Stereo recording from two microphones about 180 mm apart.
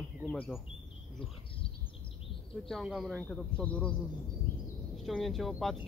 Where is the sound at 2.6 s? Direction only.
Centre (ahead or behind).